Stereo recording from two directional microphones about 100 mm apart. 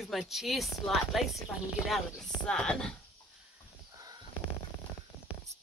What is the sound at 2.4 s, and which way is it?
Speech, 10° left (ahead or behind).